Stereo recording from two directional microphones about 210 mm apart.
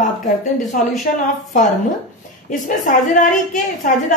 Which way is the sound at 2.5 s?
40° left (ahead or behind).